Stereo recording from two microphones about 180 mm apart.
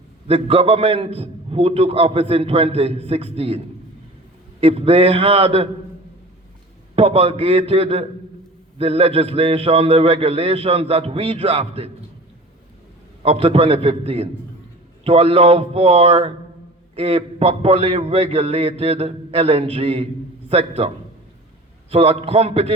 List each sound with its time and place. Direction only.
0.3 s a man's voice: 35° right (ahead or behind)
4.6 s a man's voice: 35° right (ahead or behind)
6.9 s a man's voice: 35° right (ahead or behind)
13.2 s a man's voice: 35° right (ahead or behind)